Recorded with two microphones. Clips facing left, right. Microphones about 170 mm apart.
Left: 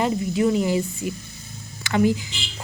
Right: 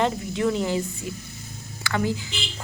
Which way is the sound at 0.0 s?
10° left (ahead or behind).